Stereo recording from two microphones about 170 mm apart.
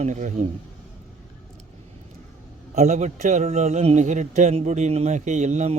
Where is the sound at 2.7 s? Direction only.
45° right (ahead or behind).